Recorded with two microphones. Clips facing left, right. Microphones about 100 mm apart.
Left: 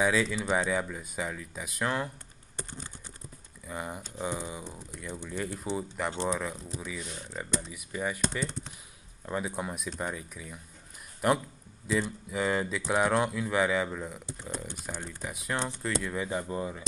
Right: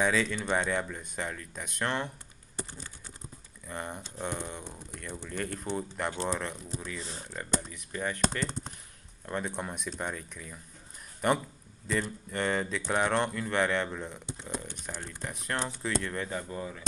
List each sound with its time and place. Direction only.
0.0 s speech: 5° left (ahead or behind)
3.6 s speech: 5° left (ahead or behind)
7.0 s speech: 30° right (ahead or behind)
7.7 s speech: 10° left (ahead or behind)
9.2 s speech: 5° left (ahead or behind)
16.3 s speech: 20° left (ahead or behind)